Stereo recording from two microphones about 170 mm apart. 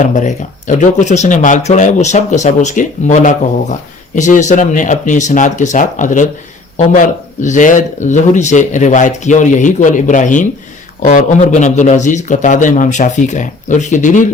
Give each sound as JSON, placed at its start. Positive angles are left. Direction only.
{"t": 0.0, "sound": "speech", "side_deg": 45}